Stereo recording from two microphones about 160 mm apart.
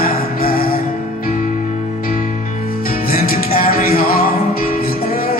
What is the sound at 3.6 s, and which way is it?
Music, 65° left (ahead or behind).